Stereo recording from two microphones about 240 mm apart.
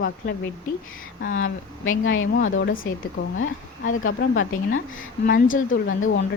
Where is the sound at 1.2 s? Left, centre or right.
Left.